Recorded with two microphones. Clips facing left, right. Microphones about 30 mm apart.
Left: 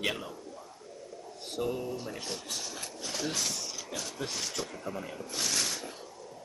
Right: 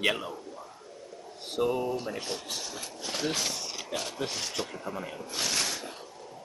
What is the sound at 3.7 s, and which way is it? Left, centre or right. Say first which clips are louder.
Speech: right 4 dB; right.